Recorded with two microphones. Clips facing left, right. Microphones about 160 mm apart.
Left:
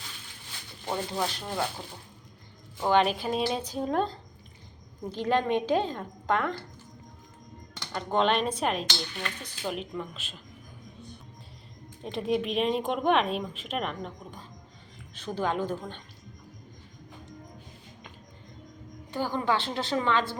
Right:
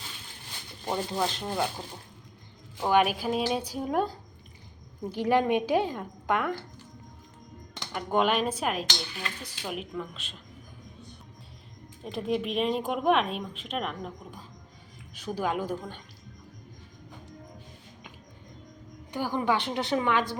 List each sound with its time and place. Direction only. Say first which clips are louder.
0.9 s speech: right 1 dB; 5° right (ahead or behind)
1.3 s speech: right 2 dB; 20° right (ahead or behind)
2.8 s a woman's voice: even; 10° right (ahead or behind)
7.9 s speech: even; 10° right (ahead or behind)
12.1 s a woman's voice: left 1 dB; centre (ahead or behind)
19.1 s a woman's voice: even; 15° right (ahead or behind)